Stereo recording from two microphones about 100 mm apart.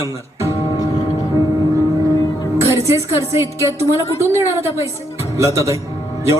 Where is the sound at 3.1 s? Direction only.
30° right (ahead or behind).